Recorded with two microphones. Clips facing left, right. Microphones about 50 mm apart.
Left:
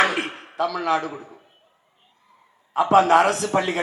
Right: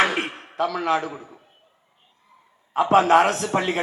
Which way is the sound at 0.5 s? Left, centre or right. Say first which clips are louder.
Even; right.